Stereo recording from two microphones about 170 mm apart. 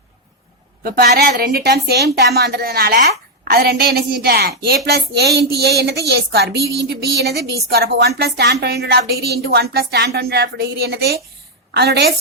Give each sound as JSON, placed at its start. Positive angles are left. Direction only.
{"t": 0.8, "sound": "a woman's voice", "side_deg": -65}